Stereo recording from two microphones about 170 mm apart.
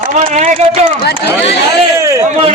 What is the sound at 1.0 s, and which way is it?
Speech, 70° left (ahead or behind).